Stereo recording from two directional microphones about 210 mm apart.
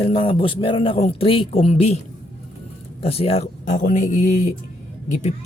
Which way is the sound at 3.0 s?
30° left (ahead or behind).